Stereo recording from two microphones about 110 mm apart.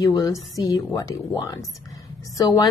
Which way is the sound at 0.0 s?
30° left (ahead or behind).